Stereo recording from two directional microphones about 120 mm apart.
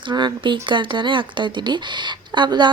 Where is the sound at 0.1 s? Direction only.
40° right (ahead or behind).